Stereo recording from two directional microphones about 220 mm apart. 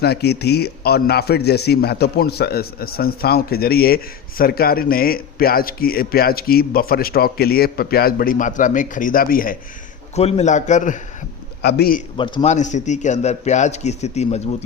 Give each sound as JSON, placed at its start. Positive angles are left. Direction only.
{"t": 0.0, "sound": "a man's voice", "side_deg": 50}
{"t": 10.2, "sound": "a man's voice", "side_deg": 30}
{"t": 12.1, "sound": "a man's voice", "side_deg": 20}